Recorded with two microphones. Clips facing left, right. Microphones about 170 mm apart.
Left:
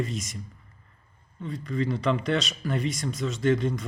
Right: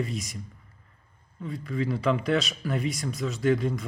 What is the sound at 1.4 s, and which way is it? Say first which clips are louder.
Speech: left 1 dB; 5° right (ahead or behind).